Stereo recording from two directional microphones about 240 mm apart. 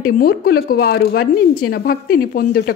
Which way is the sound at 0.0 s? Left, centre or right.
Left.